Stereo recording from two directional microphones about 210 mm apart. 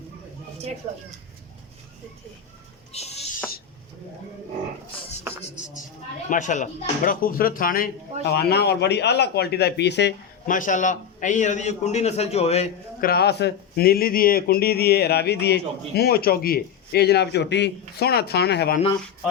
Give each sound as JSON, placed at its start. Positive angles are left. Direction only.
{"t": 2.9, "sound": "a sound", "side_deg": 30}
{"t": 6.3, "sound": "speech", "side_deg": 35}
{"t": 10.5, "sound": "a man's voice", "side_deg": 40}
{"t": 13.0, "sound": "speech", "side_deg": 45}